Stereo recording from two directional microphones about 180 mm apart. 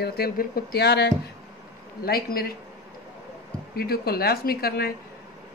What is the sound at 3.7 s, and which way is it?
Speech, 60° left (ahead or behind).